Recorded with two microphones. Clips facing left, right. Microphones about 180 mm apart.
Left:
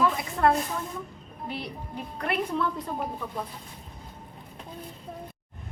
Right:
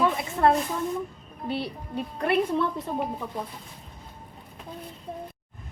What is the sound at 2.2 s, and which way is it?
Speech, 25° right (ahead or behind).